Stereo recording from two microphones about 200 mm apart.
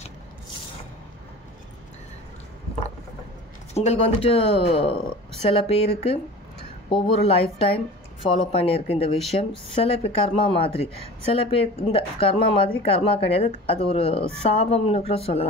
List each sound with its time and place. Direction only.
3.7 s speech: 30° left (ahead or behind)